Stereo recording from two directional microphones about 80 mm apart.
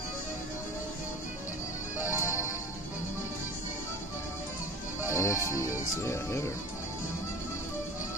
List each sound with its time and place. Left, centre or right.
2.0 s music: left
5.0 s music: left